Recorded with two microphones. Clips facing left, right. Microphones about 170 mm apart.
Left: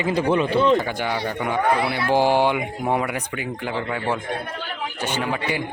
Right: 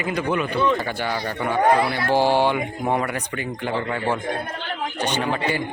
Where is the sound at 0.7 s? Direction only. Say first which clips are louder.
Left 2 dB; 15° left (ahead or behind).